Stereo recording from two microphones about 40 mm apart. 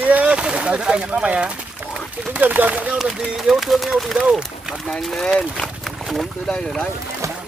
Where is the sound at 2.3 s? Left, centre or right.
Right.